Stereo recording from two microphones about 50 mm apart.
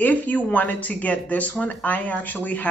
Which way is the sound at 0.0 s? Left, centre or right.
Left.